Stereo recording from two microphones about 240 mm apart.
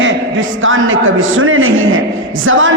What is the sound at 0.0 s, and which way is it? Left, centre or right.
A man's voice, right.